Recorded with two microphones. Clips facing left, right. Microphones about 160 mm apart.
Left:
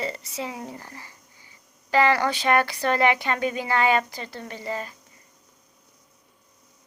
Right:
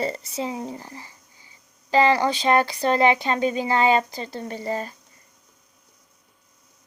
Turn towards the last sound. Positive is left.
turn(degrees=-35)  # may be behind; listen again after turning